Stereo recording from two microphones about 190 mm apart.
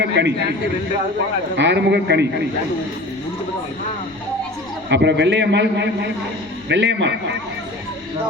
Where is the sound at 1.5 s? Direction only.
65° right (ahead or behind).